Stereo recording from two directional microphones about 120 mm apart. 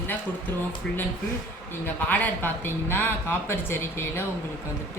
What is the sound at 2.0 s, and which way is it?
Speech, 15° left (ahead or behind).